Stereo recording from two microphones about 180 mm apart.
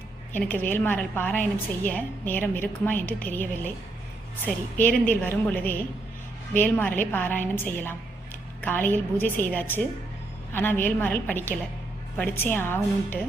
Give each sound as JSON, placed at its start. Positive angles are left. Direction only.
{"t": 0.3, "sound": "a woman's voice", "side_deg": 10}